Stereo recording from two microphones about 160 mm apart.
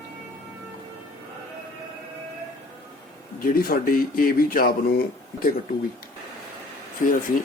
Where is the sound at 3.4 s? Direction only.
65° left (ahead or behind).